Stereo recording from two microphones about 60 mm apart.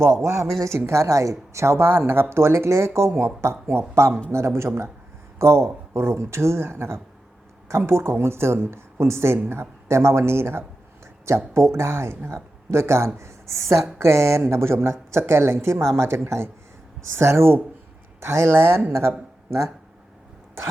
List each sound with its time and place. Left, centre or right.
0.3 s speech: right